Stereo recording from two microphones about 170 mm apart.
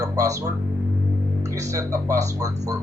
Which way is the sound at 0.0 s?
20° right (ahead or behind).